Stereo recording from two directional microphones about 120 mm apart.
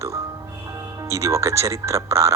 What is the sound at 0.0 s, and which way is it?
Music, 25° right (ahead or behind).